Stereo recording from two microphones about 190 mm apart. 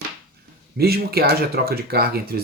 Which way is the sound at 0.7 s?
55° right (ahead or behind).